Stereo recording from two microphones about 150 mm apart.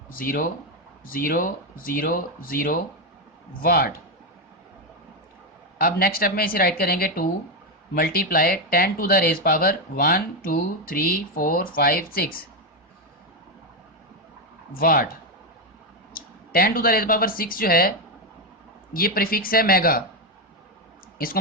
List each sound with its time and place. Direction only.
0.1 s a woman's voice: 70° left (ahead or behind)
5.8 s a woman's voice: 80° left
14.7 s speech: 75° left (ahead or behind)
16.1 s speech: 75° left (ahead or behind)
18.9 s a woman's voice: 80° left
21.2 s a woman's voice: 80° left